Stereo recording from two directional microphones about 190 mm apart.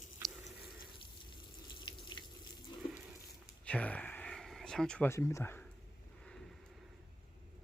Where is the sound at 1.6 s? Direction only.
25° left (ahead or behind).